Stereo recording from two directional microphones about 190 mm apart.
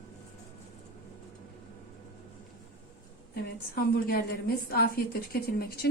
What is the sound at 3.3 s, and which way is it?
A woman's voice, 55° left (ahead or behind).